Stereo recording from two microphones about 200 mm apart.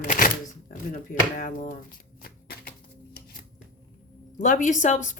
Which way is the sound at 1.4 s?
40° left (ahead or behind).